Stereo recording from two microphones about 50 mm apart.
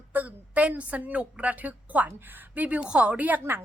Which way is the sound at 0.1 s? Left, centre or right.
Right.